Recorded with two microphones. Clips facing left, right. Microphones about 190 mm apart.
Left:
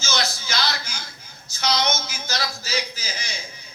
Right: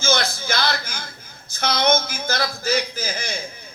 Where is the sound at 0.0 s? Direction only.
55° right (ahead or behind).